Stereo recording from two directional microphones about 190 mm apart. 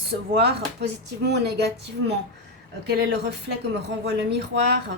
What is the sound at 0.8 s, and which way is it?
Speech, 60° right (ahead or behind).